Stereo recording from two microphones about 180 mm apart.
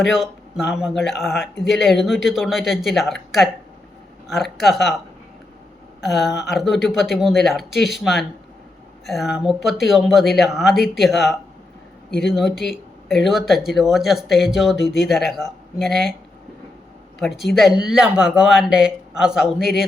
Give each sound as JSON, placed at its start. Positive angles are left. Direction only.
{"t": 0.0, "sound": "speech", "side_deg": 0}
{"t": 6.0, "sound": "speech", "side_deg": 0}
{"t": 17.2, "sound": "speech", "side_deg": 0}